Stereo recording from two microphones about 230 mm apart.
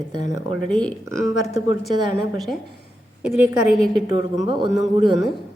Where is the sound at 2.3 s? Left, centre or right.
Centre.